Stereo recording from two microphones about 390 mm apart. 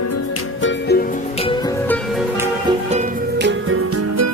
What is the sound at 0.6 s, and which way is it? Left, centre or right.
Music, left.